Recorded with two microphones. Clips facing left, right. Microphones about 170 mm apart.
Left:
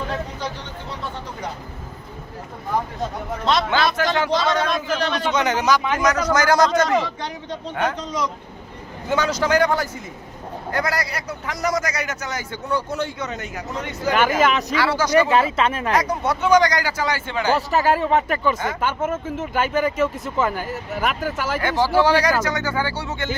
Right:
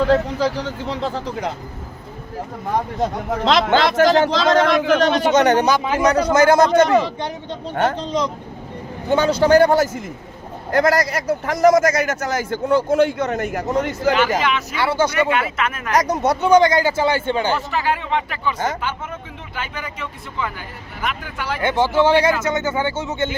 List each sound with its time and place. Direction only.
0.1 s speech: 90° right
3.4 s speech: 90° right
3.9 s a man's voice: 45° right (ahead or behind)
4.3 s a man's voice: 90° right
4.9 s a man's voice: 45° right (ahead or behind)
5.5 s a man's voice: 30° right (ahead or behind)
7.8 s a man's voice: 35° right (ahead or behind); by 14.1 s 50° right (ahead or behind)
14.3 s speech: 40° left (ahead or behind)
14.8 s a man's voice: 25° right (ahead or behind)
15.1 s speech: 30° left (ahead or behind)
15.9 s a man's voice: 40° right (ahead or behind)
17.5 s speech: 40° left (ahead or behind)
21.6 s a man's voice: 20° right (ahead or behind)